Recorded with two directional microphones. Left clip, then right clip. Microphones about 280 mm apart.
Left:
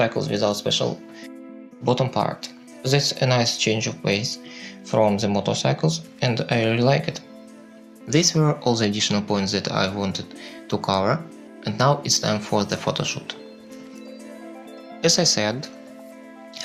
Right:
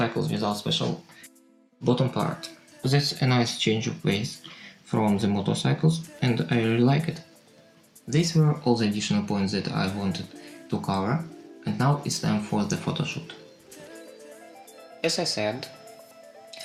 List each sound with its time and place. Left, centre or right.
0.0 s speech: left
1.8 s speech: left
8.1 s speech: left
15.0 s speech: left